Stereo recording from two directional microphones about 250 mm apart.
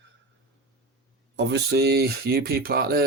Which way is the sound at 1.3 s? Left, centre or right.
Right.